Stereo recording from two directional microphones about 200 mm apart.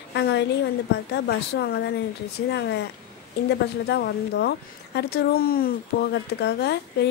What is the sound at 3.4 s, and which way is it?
A woman's voice, 55° left (ahead or behind).